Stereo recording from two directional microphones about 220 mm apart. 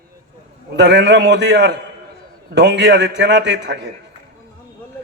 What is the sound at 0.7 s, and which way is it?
A man's voice, 50° right (ahead or behind).